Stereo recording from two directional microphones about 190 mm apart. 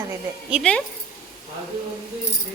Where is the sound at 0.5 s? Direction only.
5° left (ahead or behind).